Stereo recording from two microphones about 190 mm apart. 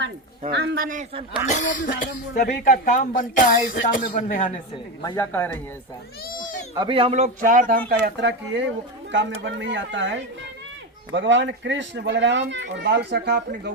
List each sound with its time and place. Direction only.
0.5 s speech: 65° right (ahead or behind)
1.5 s speech: 40° left (ahead or behind)
5.0 s speech: 15° left (ahead or behind)
6.4 s cat: 40° left (ahead or behind)
6.7 s a man's voice: 25° right (ahead or behind); by 7.8 s 45° right (ahead or behind)
7.9 s speech: 60° right (ahead or behind)